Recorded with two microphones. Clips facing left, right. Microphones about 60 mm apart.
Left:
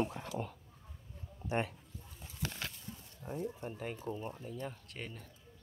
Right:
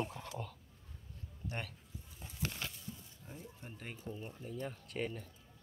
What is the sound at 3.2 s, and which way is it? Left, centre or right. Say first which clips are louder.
Speech: left 10 dB; left.